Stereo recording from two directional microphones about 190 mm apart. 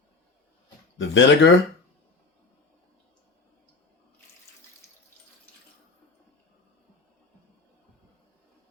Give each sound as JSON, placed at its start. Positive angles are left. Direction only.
{"t": 0.9, "sound": "speech", "side_deg": 85}